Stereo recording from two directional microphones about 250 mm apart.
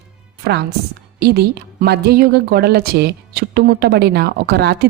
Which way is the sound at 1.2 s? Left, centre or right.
Right.